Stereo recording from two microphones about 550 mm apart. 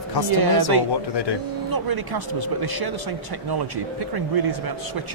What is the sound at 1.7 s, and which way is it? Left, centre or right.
Speech, right.